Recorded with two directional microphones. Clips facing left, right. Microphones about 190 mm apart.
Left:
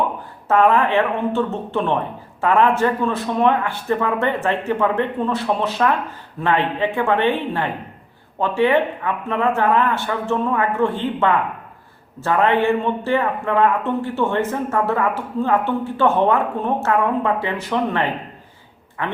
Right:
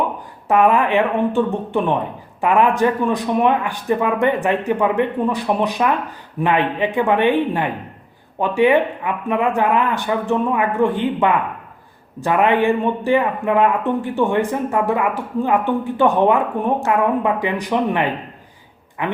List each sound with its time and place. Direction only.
0.4 s a man's voice: 15° right (ahead or behind)